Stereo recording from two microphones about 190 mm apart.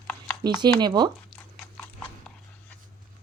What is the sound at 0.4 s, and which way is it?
Speech, 20° right (ahead or behind).